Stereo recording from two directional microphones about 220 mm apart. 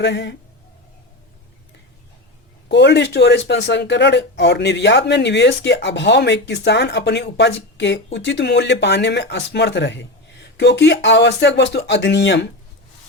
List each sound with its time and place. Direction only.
0.0 s speech: 50° left (ahead or behind)
2.6 s speech: 50° left (ahead or behind)